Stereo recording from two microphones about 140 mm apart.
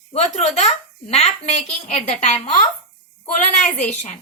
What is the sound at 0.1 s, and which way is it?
A woman's voice, 50° left (ahead or behind).